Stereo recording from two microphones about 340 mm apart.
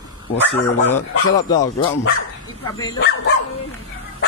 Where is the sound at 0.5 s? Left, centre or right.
Centre.